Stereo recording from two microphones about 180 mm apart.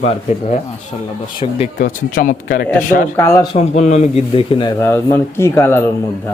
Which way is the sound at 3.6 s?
40° left (ahead or behind).